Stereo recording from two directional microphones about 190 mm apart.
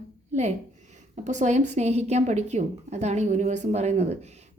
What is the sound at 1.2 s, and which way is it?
A woman's voice, 40° right (ahead or behind).